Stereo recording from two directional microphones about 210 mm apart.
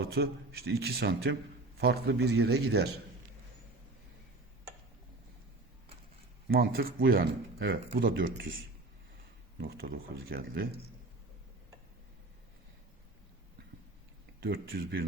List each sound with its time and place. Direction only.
0.1 s speech: 50° right (ahead or behind)
6.5 s speech: 45° right (ahead or behind)
9.6 s speech: 45° right (ahead or behind)
14.4 s speech: 45° right (ahead or behind)